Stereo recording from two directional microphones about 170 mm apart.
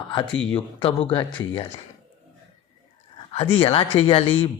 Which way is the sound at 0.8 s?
30° left (ahead or behind).